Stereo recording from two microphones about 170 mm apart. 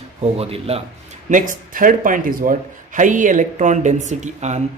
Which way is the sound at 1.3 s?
50° right (ahead or behind).